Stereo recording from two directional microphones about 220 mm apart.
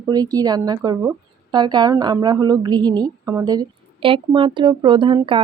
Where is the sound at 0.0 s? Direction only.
15° right (ahead or behind).